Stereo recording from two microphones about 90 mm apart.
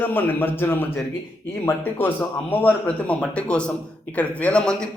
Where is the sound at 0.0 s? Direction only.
20° left (ahead or behind).